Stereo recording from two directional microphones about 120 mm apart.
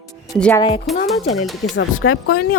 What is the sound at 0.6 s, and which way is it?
Speech, 40° left (ahead or behind).